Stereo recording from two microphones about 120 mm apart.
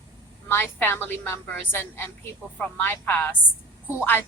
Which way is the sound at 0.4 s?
15° left (ahead or behind).